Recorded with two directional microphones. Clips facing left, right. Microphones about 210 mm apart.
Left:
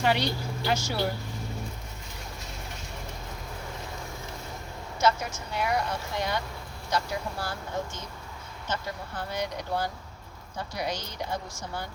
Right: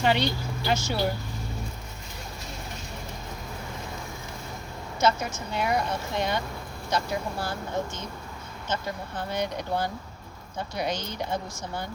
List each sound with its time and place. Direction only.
0.0 s speech: 25° right (ahead or behind)
4.9 s speech: 25° right (ahead or behind)